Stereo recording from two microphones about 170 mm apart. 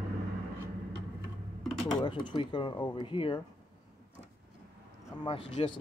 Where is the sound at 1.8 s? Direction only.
25° left (ahead or behind).